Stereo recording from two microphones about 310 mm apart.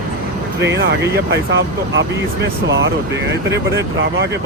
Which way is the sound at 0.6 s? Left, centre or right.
Right.